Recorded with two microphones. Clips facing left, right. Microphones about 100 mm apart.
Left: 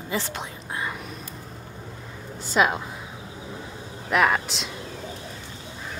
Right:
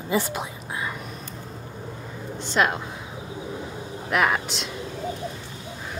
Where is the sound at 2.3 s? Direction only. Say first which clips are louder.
Left 1 dB; 5° left (ahead or behind).